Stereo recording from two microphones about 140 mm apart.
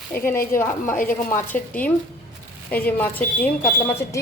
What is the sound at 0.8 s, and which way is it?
Speech, 80° left.